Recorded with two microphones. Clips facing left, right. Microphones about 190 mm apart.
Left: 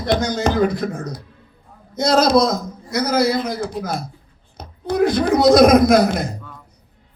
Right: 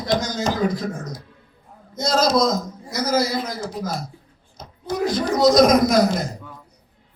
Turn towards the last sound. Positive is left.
turn(degrees=60)  # may be behind; listen again after turning